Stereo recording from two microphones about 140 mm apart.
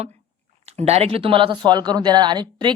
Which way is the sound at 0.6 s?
50° right (ahead or behind).